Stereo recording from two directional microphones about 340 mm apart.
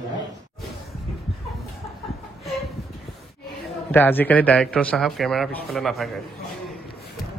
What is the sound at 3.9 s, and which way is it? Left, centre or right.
A man's voice, centre.